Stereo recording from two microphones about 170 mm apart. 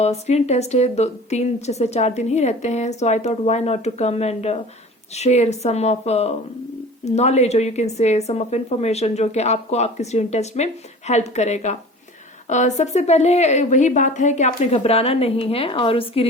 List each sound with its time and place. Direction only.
0.0 s a woman's voice: 40° left (ahead or behind)